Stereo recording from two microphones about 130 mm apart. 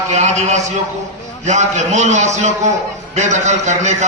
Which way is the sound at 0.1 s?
65° right (ahead or behind).